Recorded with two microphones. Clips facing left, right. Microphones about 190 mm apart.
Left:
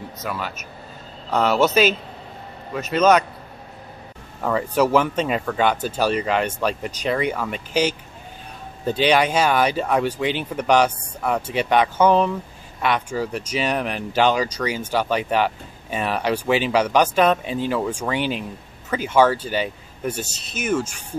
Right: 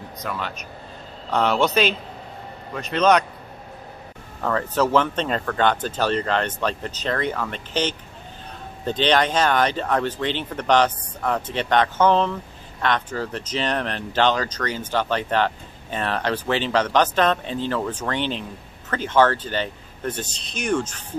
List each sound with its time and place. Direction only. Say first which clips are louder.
0.2 s speech: even; 5° left (ahead or behind)
4.4 s speech: left 2 dB; 10° left (ahead or behind)